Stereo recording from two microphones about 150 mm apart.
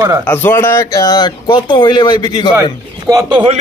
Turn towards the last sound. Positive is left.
turn(degrees=-25)  # may be behind; listen again after turning